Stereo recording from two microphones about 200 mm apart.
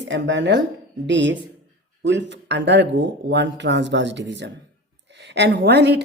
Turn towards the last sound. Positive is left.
turn(degrees=-55)  # may be behind; listen again after turning